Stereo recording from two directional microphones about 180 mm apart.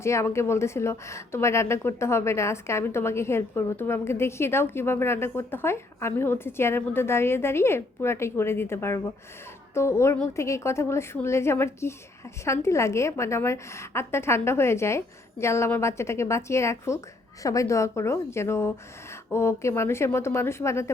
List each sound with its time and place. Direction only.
0.0 s a woman's voice: 15° left (ahead or behind)